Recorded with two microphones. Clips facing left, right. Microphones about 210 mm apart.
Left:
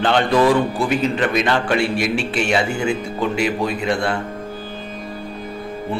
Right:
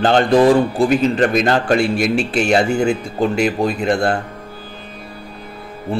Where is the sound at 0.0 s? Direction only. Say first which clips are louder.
Right 4 dB; 35° right (ahead or behind).